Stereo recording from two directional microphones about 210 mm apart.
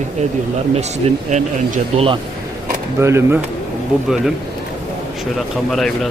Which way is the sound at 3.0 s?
10° right (ahead or behind).